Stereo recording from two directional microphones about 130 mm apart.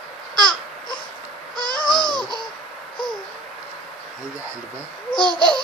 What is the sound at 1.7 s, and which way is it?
Babbling, 5° left (ahead or behind).